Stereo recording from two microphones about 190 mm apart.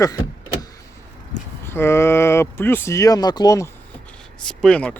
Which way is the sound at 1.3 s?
15° left (ahead or behind).